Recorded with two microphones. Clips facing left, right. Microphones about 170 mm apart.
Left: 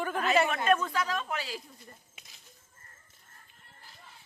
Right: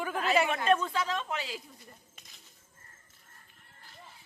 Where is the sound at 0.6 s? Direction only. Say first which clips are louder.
Even; 25° right (ahead or behind).